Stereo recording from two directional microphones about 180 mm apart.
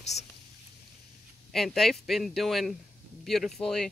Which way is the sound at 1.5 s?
Centre (ahead or behind).